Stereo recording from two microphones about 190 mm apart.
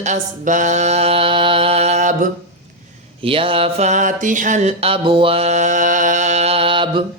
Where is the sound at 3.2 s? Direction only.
30° right (ahead or behind).